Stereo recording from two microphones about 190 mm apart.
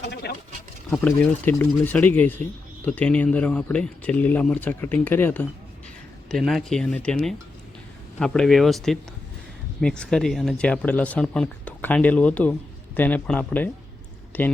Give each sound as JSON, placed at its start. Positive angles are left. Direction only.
{"t": 0.0, "sound": "speech", "side_deg": 60}
{"t": 0.9, "sound": "speech", "side_deg": 5}